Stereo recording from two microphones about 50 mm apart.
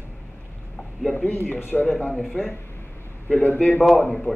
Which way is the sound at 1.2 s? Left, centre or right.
Left.